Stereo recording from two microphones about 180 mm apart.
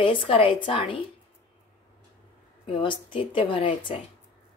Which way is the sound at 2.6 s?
30° left (ahead or behind).